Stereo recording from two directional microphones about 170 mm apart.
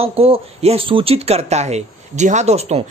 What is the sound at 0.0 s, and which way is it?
Speech, 35° right (ahead or behind).